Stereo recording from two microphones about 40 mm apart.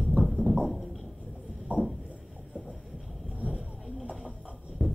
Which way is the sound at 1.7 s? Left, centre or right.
Right.